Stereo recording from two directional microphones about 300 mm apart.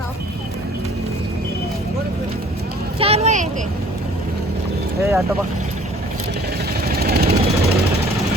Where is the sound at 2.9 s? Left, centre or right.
Centre.